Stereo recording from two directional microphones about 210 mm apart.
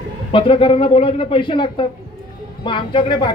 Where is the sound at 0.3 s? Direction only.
25° left (ahead or behind).